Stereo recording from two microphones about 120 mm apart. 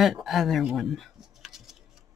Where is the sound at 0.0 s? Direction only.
Centre (ahead or behind).